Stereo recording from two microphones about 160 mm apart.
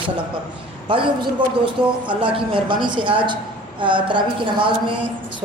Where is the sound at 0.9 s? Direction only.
30° right (ahead or behind).